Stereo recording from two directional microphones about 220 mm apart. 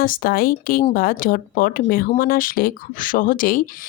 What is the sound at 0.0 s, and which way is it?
A woman's voice, 40° left (ahead or behind).